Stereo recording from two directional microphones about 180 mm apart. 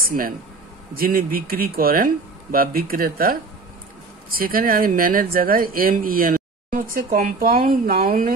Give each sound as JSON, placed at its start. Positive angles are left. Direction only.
{"t": 0.9, "sound": "speech", "side_deg": -55}